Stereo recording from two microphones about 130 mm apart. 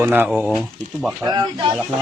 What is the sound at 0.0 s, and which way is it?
Speech, 15° right (ahead or behind).